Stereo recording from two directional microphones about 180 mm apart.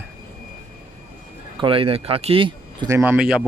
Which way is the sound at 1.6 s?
30° right (ahead or behind).